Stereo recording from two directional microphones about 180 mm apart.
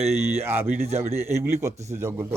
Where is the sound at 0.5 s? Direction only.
35° right (ahead or behind).